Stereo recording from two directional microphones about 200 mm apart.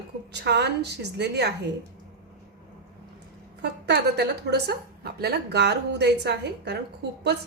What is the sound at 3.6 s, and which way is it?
A woman's voice, 55° right (ahead or behind).